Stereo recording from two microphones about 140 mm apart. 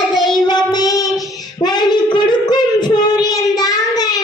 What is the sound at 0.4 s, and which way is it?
Child singing, 30° left (ahead or behind).